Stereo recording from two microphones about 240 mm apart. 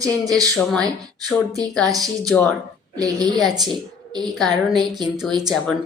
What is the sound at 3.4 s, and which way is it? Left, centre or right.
A woman's voice, centre.